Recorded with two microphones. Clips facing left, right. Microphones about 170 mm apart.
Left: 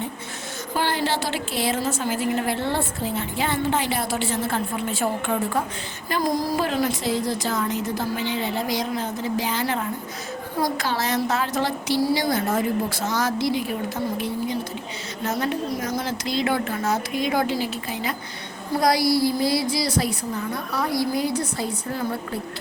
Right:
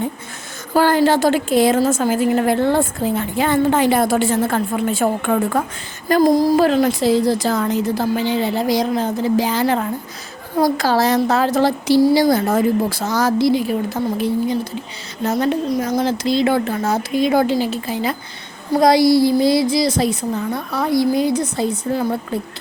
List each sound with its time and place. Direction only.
0.7 s a woman's voice: 45° right (ahead or behind)
6.2 s a woman's voice: 25° right (ahead or behind)